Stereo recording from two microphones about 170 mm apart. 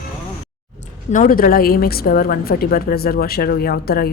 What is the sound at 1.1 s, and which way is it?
A woman's voice, 50° left (ahead or behind).